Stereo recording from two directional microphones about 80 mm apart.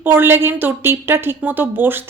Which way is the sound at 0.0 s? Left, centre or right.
Right.